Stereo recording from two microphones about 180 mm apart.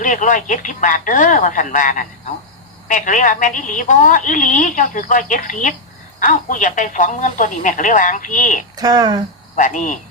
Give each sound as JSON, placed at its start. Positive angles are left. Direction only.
{"t": 0.0, "sound": "a woman's voice", "side_deg": 45}
{"t": 8.7, "sound": "speech", "side_deg": -20}
{"t": 9.6, "sound": "a woman's voice", "side_deg": 45}